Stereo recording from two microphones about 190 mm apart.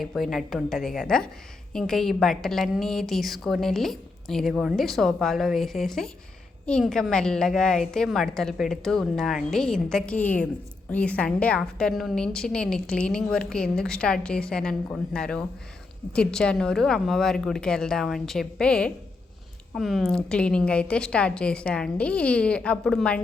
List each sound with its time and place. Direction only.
0.0 s a woman's voice: centre (ahead or behind)